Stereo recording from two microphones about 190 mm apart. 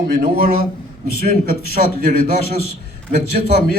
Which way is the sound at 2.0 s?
50° right (ahead or behind).